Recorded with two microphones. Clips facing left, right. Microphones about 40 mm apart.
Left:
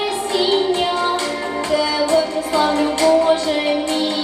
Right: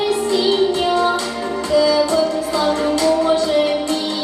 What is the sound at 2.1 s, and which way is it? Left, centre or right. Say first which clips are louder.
Music: even; left.